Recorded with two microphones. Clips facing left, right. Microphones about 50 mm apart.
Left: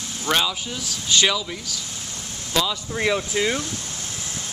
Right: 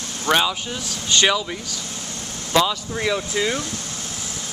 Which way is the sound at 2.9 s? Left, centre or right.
Centre.